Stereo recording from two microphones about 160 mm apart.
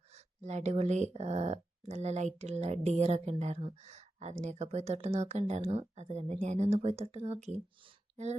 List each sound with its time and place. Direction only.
0.4 s speech: 45° right (ahead or behind)